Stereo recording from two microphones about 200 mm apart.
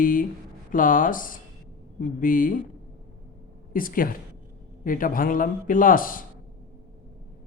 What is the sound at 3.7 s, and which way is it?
Speech, 45° left (ahead or behind).